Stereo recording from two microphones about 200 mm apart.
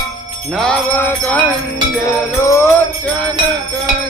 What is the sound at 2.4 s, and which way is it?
Jingle bell, 15° left (ahead or behind).